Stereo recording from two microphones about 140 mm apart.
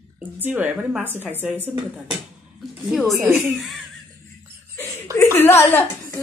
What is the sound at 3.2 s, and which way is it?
Speech, 15° right (ahead or behind).